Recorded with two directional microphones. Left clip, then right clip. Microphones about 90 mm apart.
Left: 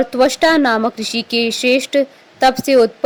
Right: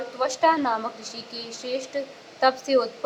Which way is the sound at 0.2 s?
60° left (ahead or behind).